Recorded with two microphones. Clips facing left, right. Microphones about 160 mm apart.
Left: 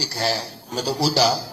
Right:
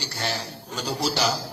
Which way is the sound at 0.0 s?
35° left (ahead or behind).